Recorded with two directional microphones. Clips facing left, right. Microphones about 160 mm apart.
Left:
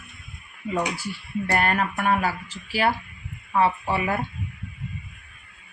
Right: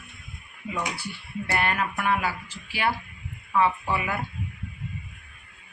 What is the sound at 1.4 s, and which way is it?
Speech, 45° left (ahead or behind).